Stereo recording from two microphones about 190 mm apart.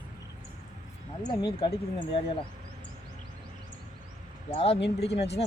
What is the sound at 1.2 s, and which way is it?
Speech, 25° left (ahead or behind).